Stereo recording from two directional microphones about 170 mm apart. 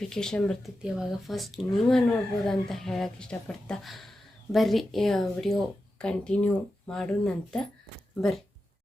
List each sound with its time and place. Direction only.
0.0 s speech: 5° left (ahead or behind)